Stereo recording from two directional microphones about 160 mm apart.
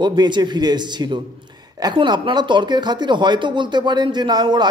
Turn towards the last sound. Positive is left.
turn(degrees=-25)  # may be behind; listen again after turning